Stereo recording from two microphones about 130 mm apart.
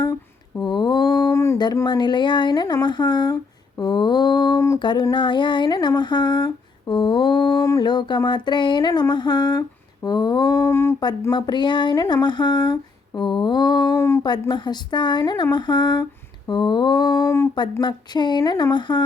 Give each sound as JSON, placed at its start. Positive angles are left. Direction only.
{"t": 0.6, "sound": "a sound", "side_deg": 35}
{"t": 1.3, "sound": "a sound", "side_deg": 20}
{"t": 1.5, "sound": "speech", "side_deg": 30}
{"t": 7.6, "sound": "speech", "side_deg": 25}
{"t": 11.3, "sound": "speech", "side_deg": 35}
{"t": 13.9, "sound": "speech", "side_deg": 20}
{"t": 14.3, "sound": "speech", "side_deg": 35}
{"t": 17.2, "sound": "speech", "side_deg": 20}
{"t": 17.5, "sound": "speech", "side_deg": 35}